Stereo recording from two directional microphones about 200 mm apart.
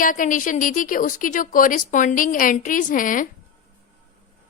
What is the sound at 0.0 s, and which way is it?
Speech, 40° left (ahead or behind).